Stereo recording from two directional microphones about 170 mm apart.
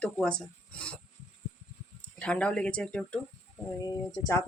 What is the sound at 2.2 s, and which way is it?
Speech, 5° left (ahead or behind).